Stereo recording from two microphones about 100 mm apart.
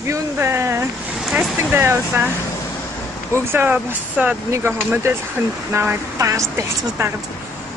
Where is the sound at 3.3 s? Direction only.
20° right (ahead or behind).